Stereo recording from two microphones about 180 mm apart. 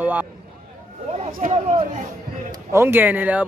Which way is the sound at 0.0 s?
10° right (ahead or behind).